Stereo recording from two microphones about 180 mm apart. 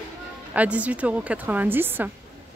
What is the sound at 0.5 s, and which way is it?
Speech, 10° right (ahead or behind).